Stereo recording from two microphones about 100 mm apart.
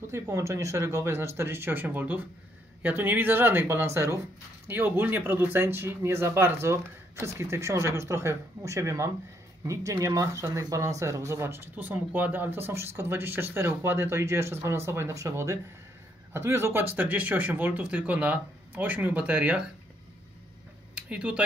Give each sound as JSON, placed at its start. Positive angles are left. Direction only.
{"t": 0.1, "sound": "speech", "side_deg": -30}
{"t": 21.1, "sound": "speech", "side_deg": -10}